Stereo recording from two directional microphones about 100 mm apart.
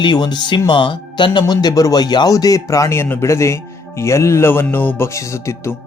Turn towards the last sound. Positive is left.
turn(degrees=25)  # may be behind; listen again after turning